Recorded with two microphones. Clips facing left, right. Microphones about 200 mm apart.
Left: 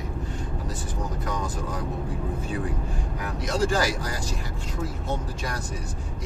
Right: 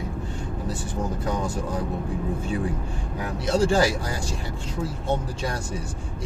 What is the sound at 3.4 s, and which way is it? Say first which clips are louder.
Speech: right 4 dB; 30° right (ahead or behind).